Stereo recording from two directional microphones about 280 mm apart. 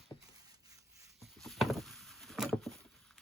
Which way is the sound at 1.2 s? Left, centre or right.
Centre.